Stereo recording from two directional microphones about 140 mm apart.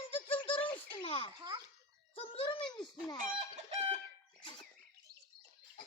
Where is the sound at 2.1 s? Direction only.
45° left (ahead or behind).